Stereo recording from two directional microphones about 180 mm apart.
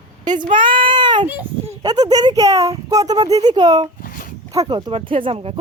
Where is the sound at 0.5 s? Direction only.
30° right (ahead or behind).